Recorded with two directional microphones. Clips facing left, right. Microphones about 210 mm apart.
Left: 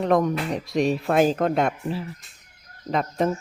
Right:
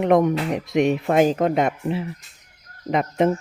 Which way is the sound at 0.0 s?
20° right (ahead or behind).